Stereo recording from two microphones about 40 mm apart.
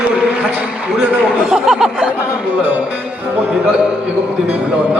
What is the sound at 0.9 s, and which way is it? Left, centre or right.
Speech, right.